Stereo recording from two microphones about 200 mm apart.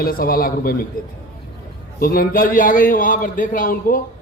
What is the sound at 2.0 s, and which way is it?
A man's voice, 45° left (ahead or behind).